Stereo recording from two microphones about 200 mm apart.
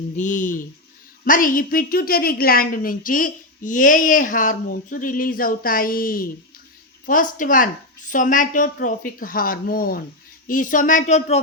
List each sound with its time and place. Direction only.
0.2 s a woman's voice: 40° left (ahead or behind)